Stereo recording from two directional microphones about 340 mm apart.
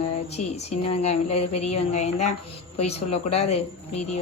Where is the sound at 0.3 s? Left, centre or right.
Centre.